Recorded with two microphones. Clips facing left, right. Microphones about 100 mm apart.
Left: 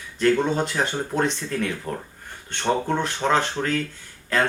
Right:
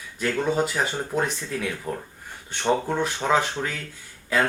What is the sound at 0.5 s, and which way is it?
Speech, 5° right (ahead or behind).